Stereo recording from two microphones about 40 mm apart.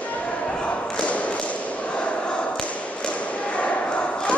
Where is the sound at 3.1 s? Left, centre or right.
Left.